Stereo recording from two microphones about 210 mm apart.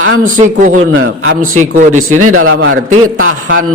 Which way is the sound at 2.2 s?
80° right.